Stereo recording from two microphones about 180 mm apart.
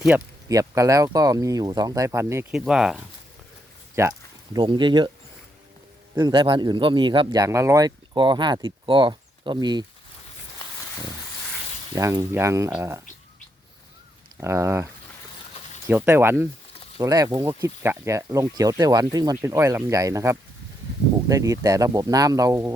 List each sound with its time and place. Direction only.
0.1 s speech: 10° right (ahead or behind)
2.5 s speech: 5° right (ahead or behind)
4.0 s speech: 15° right (ahead or behind)
4.5 s speech: 25° right (ahead or behind)
6.1 s speech: 25° right (ahead or behind)
11.9 s speech: 20° right (ahead or behind)
14.4 s speech: 15° right (ahead or behind)
15.9 s speech: 10° right (ahead or behind)